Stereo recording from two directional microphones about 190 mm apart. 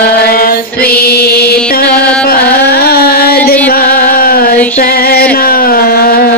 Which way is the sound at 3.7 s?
50° left (ahead or behind).